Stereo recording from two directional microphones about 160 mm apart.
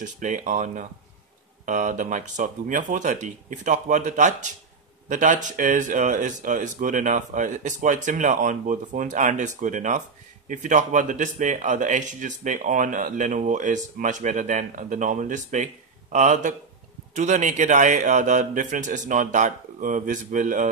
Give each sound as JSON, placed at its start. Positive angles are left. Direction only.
{"t": 0.0, "sound": "speech", "side_deg": -50}